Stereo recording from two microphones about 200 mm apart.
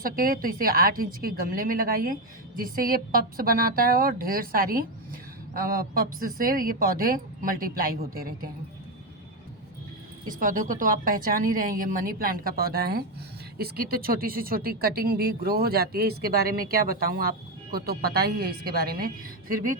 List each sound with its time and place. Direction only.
0.0 s speech: 45° right (ahead or behind)
10.2 s speech: 40° right (ahead or behind)